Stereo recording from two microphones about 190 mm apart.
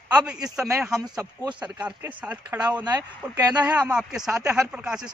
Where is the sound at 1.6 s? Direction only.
5° right (ahead or behind).